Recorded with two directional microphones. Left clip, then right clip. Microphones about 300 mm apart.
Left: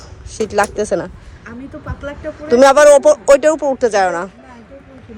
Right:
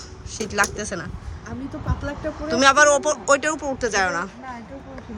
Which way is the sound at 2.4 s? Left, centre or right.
Centre.